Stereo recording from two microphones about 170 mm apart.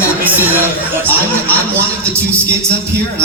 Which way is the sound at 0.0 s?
10° right (ahead or behind).